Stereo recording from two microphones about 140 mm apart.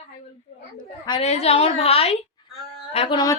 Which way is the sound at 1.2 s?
50° left (ahead or behind).